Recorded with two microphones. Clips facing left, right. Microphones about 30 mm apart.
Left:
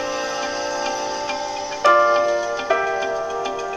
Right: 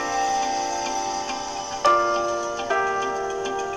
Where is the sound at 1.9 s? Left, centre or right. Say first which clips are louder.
Left 8 dB; left.